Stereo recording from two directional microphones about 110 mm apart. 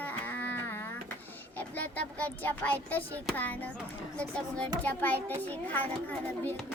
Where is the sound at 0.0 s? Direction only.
15° left (ahead or behind).